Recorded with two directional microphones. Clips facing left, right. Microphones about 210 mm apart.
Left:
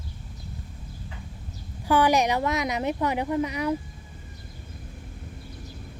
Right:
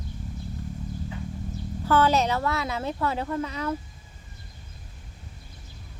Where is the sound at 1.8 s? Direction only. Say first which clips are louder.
Left 1 dB; 15° left (ahead or behind).